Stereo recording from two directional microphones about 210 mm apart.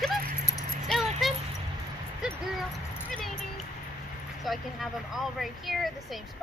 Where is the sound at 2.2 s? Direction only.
5° right (ahead or behind).